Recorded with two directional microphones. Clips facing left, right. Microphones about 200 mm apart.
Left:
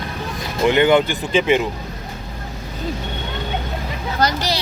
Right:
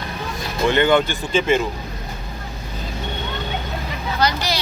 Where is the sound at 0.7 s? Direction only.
15° left (ahead or behind).